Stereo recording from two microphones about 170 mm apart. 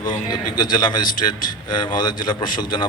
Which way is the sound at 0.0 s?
25° left (ahead or behind).